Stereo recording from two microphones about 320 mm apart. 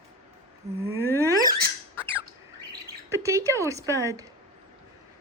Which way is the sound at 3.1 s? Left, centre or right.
Centre.